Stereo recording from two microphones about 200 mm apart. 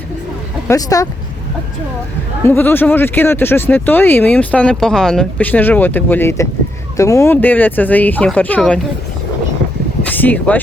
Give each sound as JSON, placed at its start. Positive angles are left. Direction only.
{"t": 0.7, "sound": "speech", "side_deg": 15}
{"t": 2.5, "sound": "speech", "side_deg": 10}
{"t": 10.0, "sound": "a sound", "side_deg": 10}